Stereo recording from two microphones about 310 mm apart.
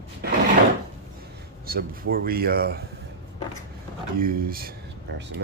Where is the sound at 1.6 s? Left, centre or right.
Right.